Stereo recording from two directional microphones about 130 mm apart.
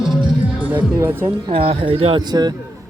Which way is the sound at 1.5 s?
45° right (ahead or behind).